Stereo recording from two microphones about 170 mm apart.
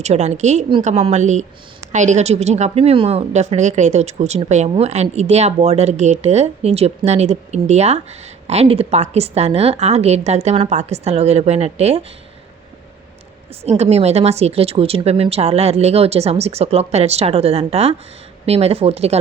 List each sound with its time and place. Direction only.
0.0 s speech: 40° right (ahead or behind)
13.6 s speech: 35° right (ahead or behind)